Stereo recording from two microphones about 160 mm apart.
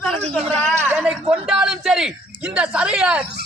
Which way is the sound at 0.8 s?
10° right (ahead or behind).